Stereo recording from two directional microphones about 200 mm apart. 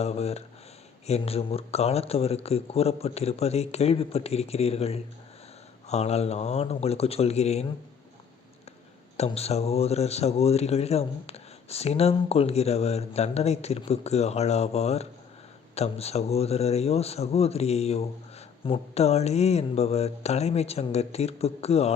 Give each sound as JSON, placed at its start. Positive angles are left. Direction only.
{"t": 0.0, "sound": "speech", "side_deg": 30}
{"t": 9.1, "sound": "speech", "side_deg": 30}